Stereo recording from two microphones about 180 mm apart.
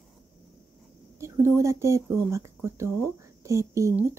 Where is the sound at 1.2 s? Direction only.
15° right (ahead or behind).